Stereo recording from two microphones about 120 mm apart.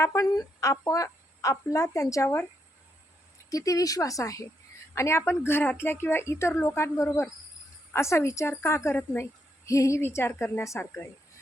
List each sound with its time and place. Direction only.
0.0 s a woman's voice: 25° left (ahead or behind)
3.5 s a woman's voice: 30° left (ahead or behind)